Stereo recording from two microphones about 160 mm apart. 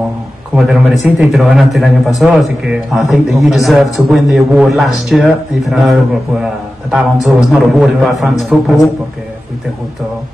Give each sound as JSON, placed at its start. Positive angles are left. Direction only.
{"t": 0.6, "sound": "a man's voice", "side_deg": -5}